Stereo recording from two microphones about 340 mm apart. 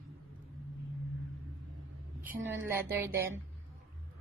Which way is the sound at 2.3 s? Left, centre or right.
Centre.